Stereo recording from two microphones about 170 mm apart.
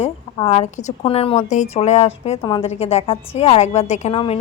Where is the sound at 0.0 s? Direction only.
35° left (ahead or behind).